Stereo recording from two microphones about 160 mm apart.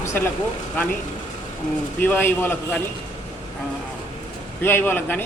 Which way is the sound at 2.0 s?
15° left (ahead or behind).